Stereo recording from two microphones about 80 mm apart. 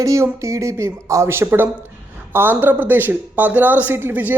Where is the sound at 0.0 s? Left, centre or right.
Right.